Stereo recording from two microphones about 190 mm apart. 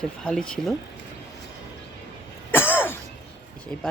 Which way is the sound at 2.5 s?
10° left (ahead or behind).